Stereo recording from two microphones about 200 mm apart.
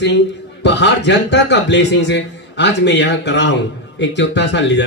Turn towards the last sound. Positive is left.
turn(degrees=60)  # may be behind; listen again after turning